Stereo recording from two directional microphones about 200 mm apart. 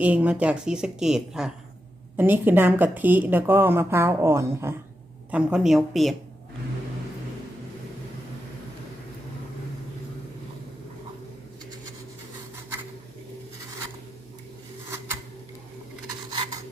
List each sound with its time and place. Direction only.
0.0 s a woman's voice: 5° right (ahead or behind)
16.3 s rub: 25° right (ahead or behind)